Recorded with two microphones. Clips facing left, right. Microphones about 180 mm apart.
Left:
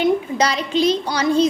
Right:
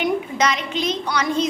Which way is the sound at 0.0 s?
35° left (ahead or behind).